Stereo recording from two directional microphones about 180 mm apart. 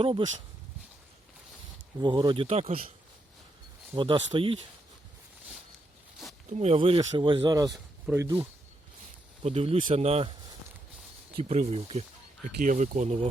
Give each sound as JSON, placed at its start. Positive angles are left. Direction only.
{"t": 0.0, "sound": "speech", "side_deg": -30}
{"t": 2.0, "sound": "speech", "side_deg": -25}
{"t": 3.9, "sound": "speech", "side_deg": -25}
{"t": 6.5, "sound": "speech", "side_deg": -35}
{"t": 9.4, "sound": "speech", "side_deg": -35}
{"t": 11.3, "sound": "speech", "side_deg": -35}